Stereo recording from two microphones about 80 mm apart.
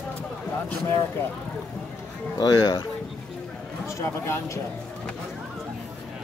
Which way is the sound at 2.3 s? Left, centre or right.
Left.